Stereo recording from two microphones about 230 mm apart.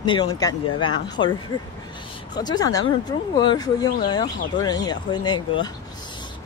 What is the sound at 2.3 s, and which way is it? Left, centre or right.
Speech, centre.